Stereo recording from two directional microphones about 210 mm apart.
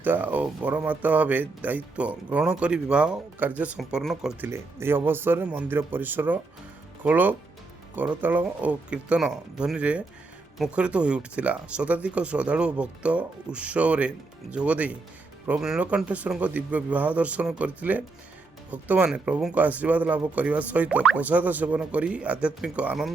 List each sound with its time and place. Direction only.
0.0 s speech: 10° right (ahead or behind)